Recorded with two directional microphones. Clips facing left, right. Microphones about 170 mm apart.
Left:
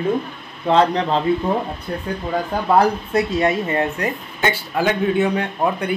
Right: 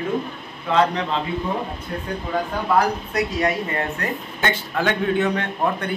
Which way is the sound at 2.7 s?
25° left (ahead or behind).